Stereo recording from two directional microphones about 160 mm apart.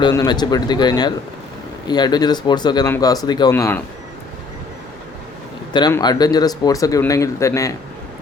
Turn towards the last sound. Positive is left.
turn(degrees=20)  # may be behind; listen again after turning